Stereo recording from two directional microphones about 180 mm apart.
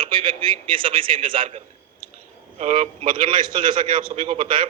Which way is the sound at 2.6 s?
35° right (ahead or behind).